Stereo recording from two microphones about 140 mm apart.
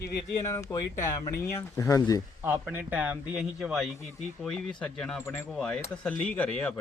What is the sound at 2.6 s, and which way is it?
Speech, 10° right (ahead or behind).